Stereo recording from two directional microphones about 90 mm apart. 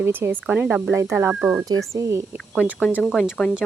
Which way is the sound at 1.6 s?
35° right (ahead or behind).